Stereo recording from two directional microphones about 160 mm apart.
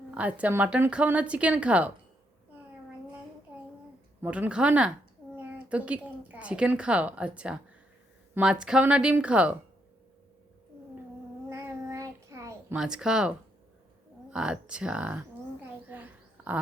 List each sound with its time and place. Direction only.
0.1 s a woman's voice: 10° right (ahead or behind)
4.2 s a woman's voice: 10° right (ahead or behind)
11.4 s child singing: 15° right (ahead or behind)
12.7 s a woman's voice: 5° right (ahead or behind)
15.9 s a sound: 10° right (ahead or behind)